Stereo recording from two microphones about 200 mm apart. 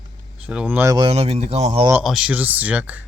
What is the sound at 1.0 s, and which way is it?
Speech, 30° right (ahead or behind).